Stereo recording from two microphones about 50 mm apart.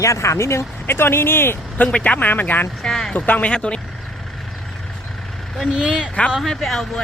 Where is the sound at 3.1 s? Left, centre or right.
Left.